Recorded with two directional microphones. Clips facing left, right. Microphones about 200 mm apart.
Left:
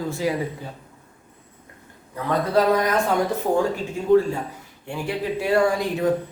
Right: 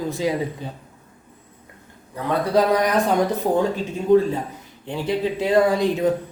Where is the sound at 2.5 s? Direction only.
15° right (ahead or behind).